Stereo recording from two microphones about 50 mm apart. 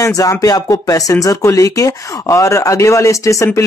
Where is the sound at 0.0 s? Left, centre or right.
Left.